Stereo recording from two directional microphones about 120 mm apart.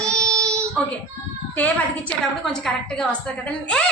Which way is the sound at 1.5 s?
15° left (ahead or behind).